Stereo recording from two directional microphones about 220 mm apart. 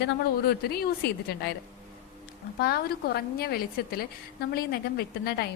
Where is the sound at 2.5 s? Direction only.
45° left (ahead or behind).